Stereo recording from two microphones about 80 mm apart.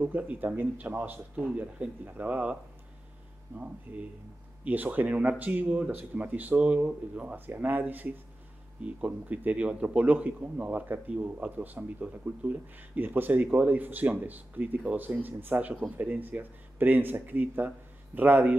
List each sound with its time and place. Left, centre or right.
0.0 s a man's voice: right
3.5 s a man's voice: centre